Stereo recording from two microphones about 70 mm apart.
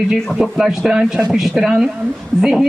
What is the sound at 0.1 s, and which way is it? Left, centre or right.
Speech, centre.